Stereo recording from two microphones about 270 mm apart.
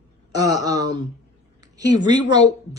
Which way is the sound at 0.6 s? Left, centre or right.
Centre.